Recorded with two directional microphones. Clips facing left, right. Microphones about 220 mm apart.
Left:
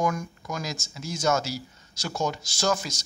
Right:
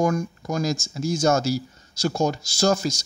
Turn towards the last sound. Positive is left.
turn(degrees=-40)  # may be behind; listen again after turning